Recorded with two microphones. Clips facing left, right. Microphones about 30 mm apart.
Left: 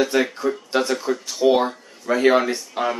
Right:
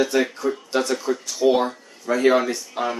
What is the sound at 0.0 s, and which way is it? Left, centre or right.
Speech, centre.